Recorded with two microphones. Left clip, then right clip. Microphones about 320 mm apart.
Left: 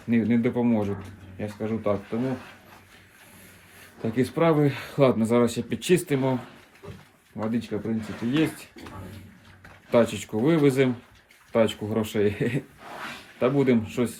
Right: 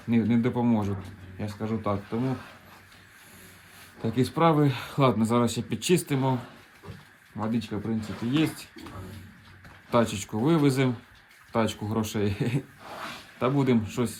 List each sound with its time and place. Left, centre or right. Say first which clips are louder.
0.1 s speech: left 2 dB; centre
4.0 s speech: left 1 dB; centre
7.3 s speech: left 2 dB; centre
9.9 s speech: left 3 dB; centre